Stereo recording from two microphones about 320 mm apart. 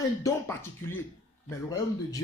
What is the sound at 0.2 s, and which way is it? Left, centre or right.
Speech, centre.